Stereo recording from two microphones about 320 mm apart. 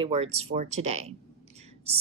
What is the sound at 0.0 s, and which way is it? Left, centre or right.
A woman's voice, centre.